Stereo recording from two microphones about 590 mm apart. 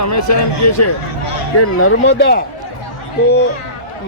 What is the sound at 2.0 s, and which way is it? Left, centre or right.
Speech, centre.